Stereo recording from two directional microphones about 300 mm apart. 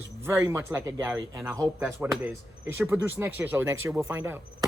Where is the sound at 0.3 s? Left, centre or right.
Centre.